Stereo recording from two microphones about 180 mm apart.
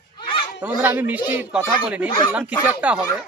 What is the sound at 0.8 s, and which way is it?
Speech, 10° right (ahead or behind).